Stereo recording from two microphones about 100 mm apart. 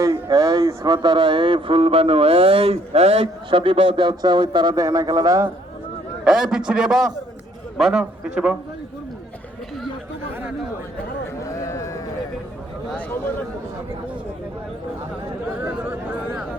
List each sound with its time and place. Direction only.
0.0 s speech: 35° right (ahead or behind)
1.0 s a man's voice: 55° right (ahead or behind)
4.7 s speech: 35° right (ahead or behind)
6.2 s a man's voice: 5° right (ahead or behind)
11.4 s a sound: 35° left (ahead or behind)
15.6 s chatter: 20° right (ahead or behind)